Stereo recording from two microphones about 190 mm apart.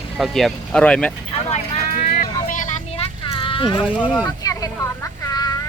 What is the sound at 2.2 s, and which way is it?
Vehicle, 45° left (ahead or behind).